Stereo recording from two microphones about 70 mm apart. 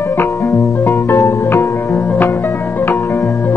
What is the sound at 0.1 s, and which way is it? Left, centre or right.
Music, left.